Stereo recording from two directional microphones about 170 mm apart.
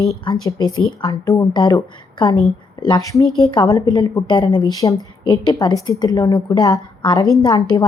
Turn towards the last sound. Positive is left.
turn(degrees=20)  # may be behind; listen again after turning